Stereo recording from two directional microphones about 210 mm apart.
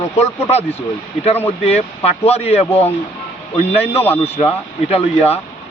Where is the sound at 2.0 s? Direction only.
30° left (ahead or behind).